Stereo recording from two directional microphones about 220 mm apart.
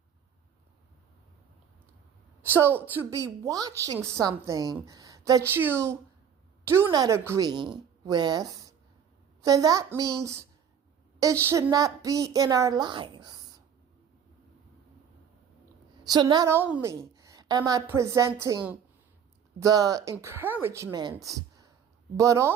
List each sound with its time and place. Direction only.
2.5 s a woman's voice: 10° right (ahead or behind)
16.0 s a woman's voice: 20° right (ahead or behind)